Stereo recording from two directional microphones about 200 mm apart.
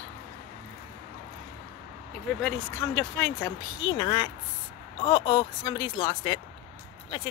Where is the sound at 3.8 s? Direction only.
25° left (ahead or behind).